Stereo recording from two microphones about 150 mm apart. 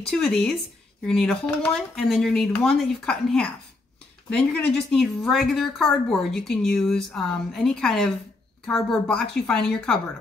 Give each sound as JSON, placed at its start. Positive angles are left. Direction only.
{"t": 0.0, "sound": "a woman's voice", "side_deg": 5}